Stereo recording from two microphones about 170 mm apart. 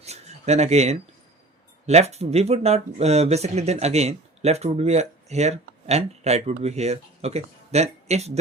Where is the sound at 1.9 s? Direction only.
40° right (ahead or behind).